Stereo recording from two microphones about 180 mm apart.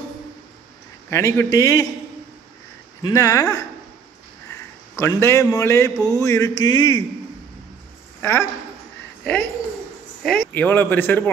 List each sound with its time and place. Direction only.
1.1 s speech: 15° left (ahead or behind)
3.0 s a man's voice: 20° left (ahead or behind)
8.2 s a woman's voice: 15° left (ahead or behind)